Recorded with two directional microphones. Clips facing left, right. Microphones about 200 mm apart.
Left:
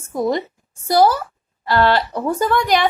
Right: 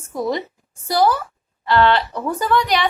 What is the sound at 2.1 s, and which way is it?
Speech, 20° left (ahead or behind).